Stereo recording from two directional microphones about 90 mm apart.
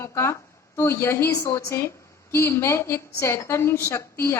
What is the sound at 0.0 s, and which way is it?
A woman's voice, 30° left (ahead or behind).